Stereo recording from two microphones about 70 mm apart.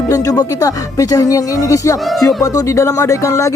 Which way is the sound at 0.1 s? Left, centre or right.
Left.